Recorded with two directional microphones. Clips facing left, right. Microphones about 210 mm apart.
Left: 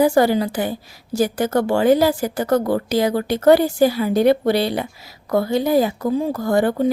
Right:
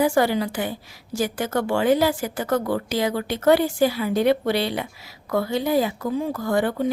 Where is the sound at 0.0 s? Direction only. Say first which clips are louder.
Left 4 dB; 40° left (ahead or behind).